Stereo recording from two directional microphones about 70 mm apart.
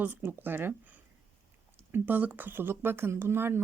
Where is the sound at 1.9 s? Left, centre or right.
Right.